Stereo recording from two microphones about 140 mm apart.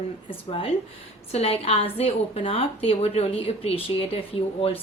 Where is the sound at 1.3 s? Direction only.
45° left (ahead or behind).